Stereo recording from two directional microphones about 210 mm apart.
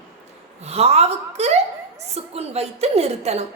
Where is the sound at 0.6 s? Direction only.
30° right (ahead or behind).